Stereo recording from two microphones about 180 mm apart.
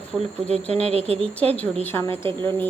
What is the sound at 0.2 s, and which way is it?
Speech, 35° right (ahead or behind).